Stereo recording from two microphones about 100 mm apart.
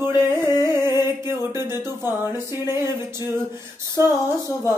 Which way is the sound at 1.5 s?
25° right (ahead or behind).